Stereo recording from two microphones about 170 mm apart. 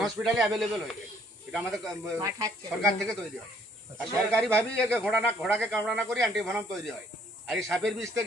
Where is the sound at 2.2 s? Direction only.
20° right (ahead or behind).